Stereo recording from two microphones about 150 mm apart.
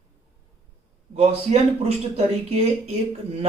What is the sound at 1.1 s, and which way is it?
Speech, 45° right (ahead or behind).